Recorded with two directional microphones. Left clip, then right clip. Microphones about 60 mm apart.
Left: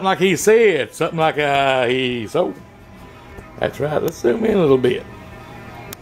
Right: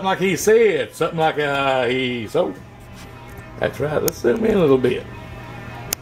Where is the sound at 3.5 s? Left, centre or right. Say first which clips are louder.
Left 1 dB; left.